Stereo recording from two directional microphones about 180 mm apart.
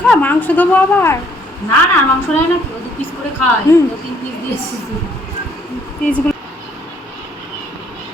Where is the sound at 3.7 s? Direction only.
15° left (ahead or behind).